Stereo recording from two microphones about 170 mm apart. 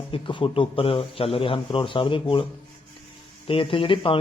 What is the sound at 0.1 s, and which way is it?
A man's voice, 30° left (ahead or behind).